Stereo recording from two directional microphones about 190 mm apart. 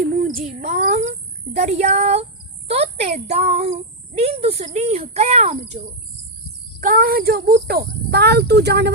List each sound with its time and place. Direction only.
0.0 s a sound: 50° right (ahead or behind)
0.3 s speech: 45° right (ahead or behind)
1.5 s a child's voice: 35° right (ahead or behind)
6.7 s speech: 50° right (ahead or behind)